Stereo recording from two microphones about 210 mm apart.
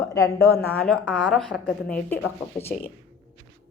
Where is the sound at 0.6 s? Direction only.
10° left (ahead or behind).